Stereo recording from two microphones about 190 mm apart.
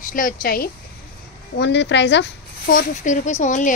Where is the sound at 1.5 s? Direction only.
65° left (ahead or behind).